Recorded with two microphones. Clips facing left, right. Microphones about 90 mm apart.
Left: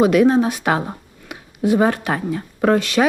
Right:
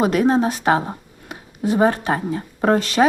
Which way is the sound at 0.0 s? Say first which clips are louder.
Left 3 dB; 35° right (ahead or behind).